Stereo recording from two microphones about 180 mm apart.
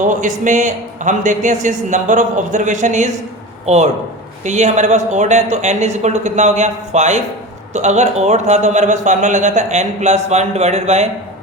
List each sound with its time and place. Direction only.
0.0 s a man's voice: 45° right (ahead or behind)